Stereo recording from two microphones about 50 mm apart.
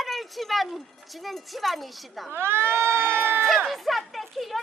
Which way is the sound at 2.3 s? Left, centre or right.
Right.